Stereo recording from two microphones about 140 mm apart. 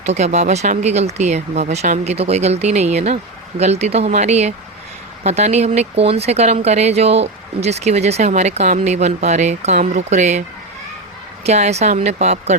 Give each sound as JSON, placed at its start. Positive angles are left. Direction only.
{"t": 0.0, "sound": "speech", "side_deg": -55}
{"t": 11.4, "sound": "speech", "side_deg": -50}